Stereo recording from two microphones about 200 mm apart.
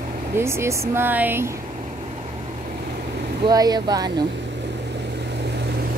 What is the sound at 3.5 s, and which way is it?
Speech, 20° right (ahead or behind).